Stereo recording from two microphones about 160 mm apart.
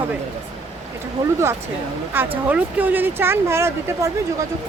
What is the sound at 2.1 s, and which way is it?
Speech, 15° right (ahead or behind).